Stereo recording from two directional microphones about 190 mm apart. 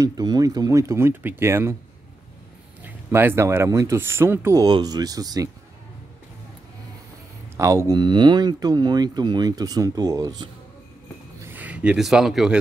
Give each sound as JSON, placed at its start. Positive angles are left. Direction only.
{"t": 0.0, "sound": "speech", "side_deg": -20}
{"t": 2.8, "sound": "speech", "side_deg": -10}
{"t": 7.5, "sound": "speech", "side_deg": -15}
{"t": 11.4, "sound": "speech", "side_deg": -10}